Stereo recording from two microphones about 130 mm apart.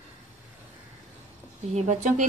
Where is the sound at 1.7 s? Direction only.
70° right (ahead or behind).